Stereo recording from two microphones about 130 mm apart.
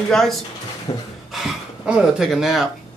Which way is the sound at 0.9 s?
30° left (ahead or behind).